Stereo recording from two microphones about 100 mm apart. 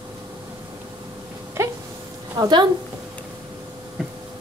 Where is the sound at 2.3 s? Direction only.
45° right (ahead or behind).